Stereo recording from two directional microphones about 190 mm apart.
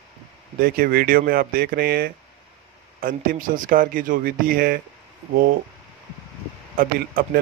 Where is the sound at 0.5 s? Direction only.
50° right (ahead or behind).